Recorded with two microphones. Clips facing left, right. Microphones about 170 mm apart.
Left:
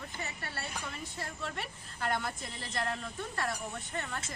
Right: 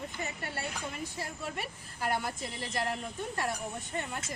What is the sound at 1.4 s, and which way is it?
Speech, 10° right (ahead or behind).